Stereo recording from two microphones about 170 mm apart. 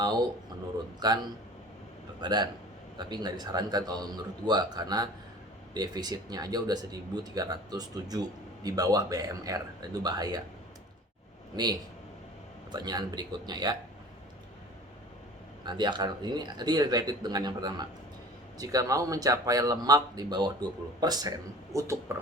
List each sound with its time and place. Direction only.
0.9 s speech: 25° right (ahead or behind)
11.5 s speech: 25° right (ahead or behind)
15.6 s speech: 25° right (ahead or behind)